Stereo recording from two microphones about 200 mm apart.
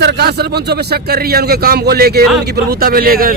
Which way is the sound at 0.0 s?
55° right (ahead or behind).